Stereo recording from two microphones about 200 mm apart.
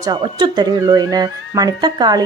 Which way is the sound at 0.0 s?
20° right (ahead or behind).